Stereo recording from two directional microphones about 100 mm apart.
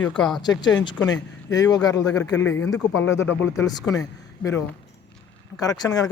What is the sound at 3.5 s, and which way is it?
Speech, 35° left (ahead or behind).